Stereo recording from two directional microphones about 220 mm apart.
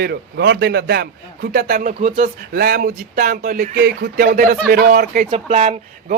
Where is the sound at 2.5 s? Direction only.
45° right (ahead or behind).